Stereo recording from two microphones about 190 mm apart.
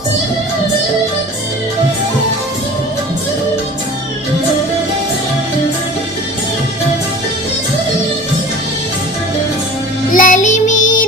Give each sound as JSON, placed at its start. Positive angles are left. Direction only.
{"t": 10.1, "sound": "music", "side_deg": 45}